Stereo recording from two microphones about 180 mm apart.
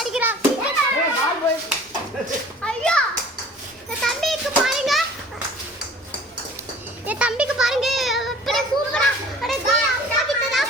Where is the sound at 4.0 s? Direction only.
Centre (ahead or behind).